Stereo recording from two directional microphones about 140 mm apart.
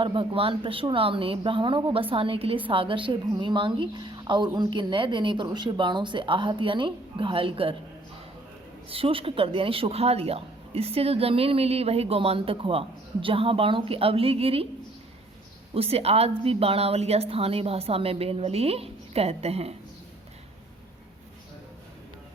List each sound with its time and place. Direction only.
0.0 s a woman's voice: 40° right (ahead or behind)
8.9 s a woman's voice: 40° right (ahead or behind)
15.7 s a woman's voice: 45° right (ahead or behind)